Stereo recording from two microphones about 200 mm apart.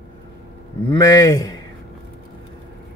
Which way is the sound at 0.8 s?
15° left (ahead or behind).